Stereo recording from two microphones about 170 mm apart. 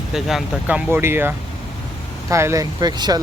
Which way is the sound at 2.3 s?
15° right (ahead or behind).